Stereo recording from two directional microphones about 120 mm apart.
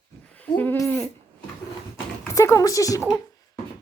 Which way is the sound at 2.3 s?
25° left (ahead or behind).